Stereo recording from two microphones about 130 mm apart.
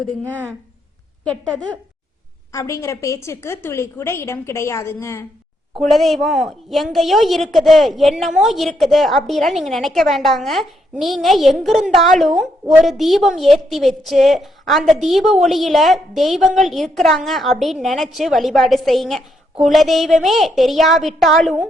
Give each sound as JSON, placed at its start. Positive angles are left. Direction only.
{"t": 1.2, "sound": "a woman's voice", "side_deg": 10}
{"t": 2.5, "sound": "a woman's voice", "side_deg": 25}
{"t": 5.9, "sound": "a woman's voice", "side_deg": 0}